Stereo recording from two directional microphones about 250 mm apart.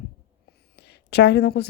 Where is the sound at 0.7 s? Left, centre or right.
Left.